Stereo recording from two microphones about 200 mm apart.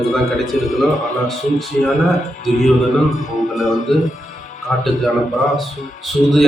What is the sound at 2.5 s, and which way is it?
Speech, 35° left (ahead or behind).